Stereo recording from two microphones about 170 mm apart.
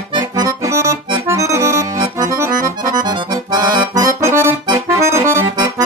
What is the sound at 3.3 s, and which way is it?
Accordion, 25° right (ahead or behind).